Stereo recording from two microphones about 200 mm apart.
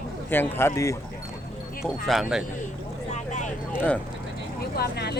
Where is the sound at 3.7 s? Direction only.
10° left (ahead or behind).